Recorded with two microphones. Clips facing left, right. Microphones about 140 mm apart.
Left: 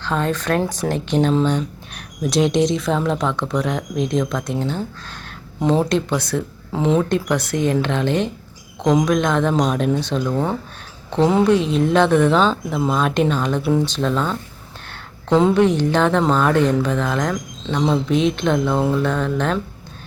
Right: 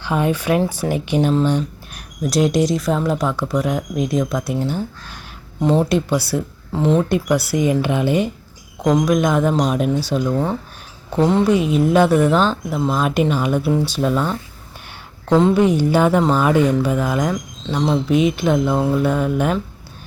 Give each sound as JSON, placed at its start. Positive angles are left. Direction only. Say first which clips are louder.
{"t": 0.0, "sound": "speech", "louder": "right 2 dB", "side_deg": -10}